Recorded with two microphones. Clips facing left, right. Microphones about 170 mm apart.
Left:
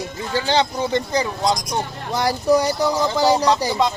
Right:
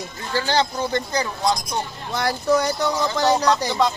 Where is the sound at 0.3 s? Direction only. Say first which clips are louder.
Left 2 dB; 20° left (ahead or behind).